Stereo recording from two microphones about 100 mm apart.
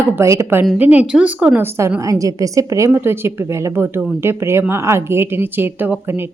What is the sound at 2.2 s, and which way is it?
Speech, 35° right (ahead or behind).